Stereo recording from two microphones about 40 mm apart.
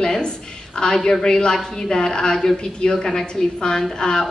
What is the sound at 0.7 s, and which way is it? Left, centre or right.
A woman's voice, centre.